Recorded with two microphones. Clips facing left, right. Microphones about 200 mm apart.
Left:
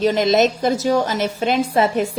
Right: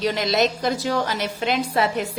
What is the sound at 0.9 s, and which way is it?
Speech, 20° left (ahead or behind).